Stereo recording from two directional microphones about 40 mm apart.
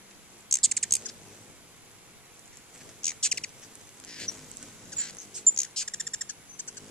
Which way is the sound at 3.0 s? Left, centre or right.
Centre.